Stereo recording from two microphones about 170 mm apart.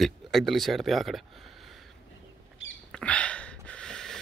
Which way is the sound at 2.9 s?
5° left (ahead or behind).